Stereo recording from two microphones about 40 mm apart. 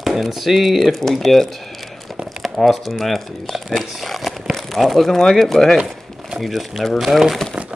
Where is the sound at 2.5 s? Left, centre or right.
Centre.